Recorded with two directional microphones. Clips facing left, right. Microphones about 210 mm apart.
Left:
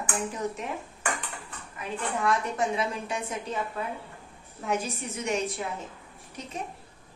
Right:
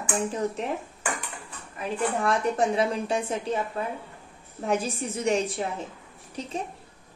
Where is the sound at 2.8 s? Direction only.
35° right (ahead or behind).